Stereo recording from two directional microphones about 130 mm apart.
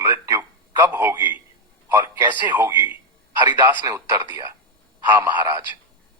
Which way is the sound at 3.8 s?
20° right (ahead or behind).